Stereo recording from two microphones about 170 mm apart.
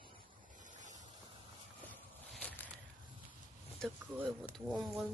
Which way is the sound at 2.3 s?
10° left (ahead or behind).